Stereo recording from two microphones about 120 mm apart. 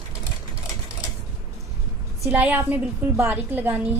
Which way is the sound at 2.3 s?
15° right (ahead or behind).